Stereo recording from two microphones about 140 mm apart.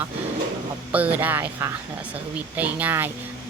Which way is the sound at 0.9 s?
10° right (ahead or behind).